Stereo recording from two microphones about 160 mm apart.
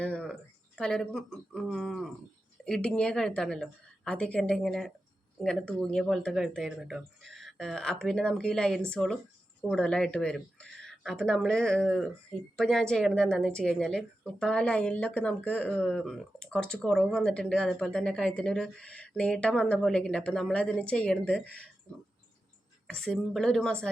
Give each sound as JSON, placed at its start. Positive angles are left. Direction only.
{"t": 0.0, "sound": "a sound", "side_deg": 5}
{"t": 0.8, "sound": "speech", "side_deg": 5}
{"t": 22.9, "sound": "speech", "side_deg": 5}